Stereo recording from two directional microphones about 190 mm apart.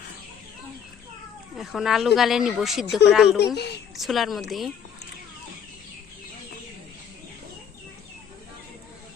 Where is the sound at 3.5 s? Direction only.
60° left (ahead or behind).